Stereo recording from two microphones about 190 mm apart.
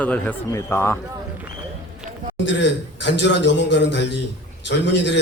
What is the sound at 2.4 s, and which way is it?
A man's voice, 70° left (ahead or behind).